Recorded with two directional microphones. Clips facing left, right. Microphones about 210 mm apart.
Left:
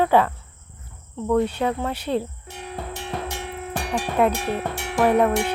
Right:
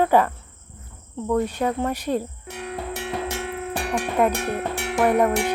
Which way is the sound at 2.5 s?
85° right.